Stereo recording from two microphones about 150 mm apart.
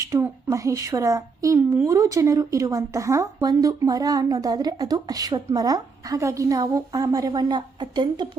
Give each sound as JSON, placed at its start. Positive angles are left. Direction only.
{"t": 0.1, "sound": "a woman's voice", "side_deg": -20}